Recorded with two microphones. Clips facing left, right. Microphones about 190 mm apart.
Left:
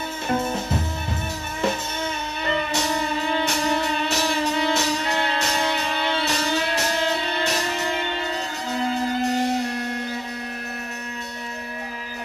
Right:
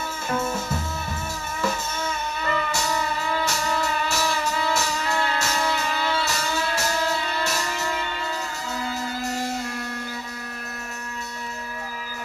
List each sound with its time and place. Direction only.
0.3 s music: 35° left (ahead or behind)